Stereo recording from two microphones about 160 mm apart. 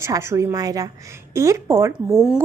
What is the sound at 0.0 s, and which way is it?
A woman's voice, 15° right (ahead or behind).